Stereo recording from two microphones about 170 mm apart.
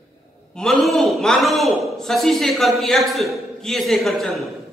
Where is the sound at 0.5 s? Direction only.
5° left (ahead or behind).